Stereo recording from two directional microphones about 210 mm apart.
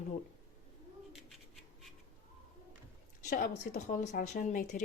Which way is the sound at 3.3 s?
40° left (ahead or behind).